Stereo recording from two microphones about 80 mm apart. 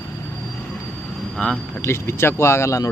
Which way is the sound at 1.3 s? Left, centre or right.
Centre.